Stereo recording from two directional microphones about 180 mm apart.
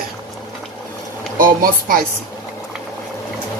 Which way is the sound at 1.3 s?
50° right (ahead or behind).